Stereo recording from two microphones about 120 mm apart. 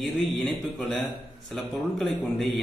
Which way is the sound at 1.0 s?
Centre (ahead or behind).